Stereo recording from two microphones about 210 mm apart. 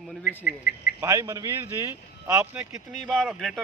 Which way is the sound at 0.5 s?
45° left (ahead or behind).